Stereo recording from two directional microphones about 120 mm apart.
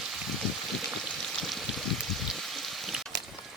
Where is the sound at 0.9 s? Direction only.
Centre (ahead or behind).